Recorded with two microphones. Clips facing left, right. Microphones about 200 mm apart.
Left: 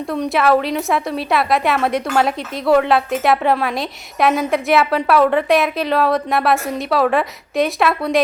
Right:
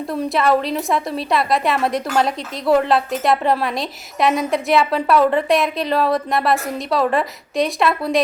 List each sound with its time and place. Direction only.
0.1 s a woman's voice: centre (ahead or behind)